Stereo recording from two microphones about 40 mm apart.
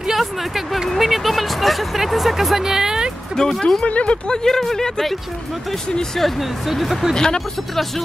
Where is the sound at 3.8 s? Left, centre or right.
Left.